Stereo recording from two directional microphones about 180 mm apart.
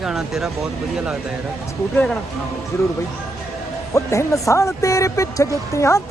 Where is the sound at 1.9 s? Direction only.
5° left (ahead or behind).